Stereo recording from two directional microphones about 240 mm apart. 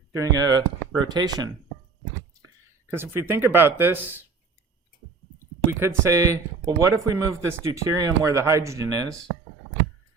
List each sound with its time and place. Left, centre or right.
0.1 s speech: centre
2.9 s speech: centre
6.0 s speech: centre